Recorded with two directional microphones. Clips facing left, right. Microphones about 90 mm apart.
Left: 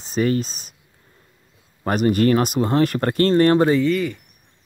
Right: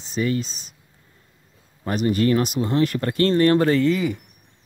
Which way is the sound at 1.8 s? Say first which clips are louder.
Left 3 dB; 50° left (ahead or behind).